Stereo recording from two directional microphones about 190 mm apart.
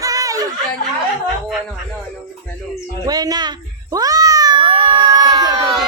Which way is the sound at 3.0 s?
20° right (ahead or behind).